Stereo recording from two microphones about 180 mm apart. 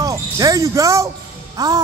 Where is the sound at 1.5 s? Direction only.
20° right (ahead or behind).